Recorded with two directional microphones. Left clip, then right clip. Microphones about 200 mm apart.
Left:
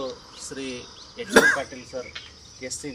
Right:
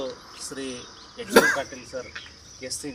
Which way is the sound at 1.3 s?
40° right (ahead or behind).